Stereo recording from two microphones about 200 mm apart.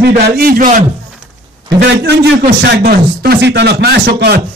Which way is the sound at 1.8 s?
55° right (ahead or behind).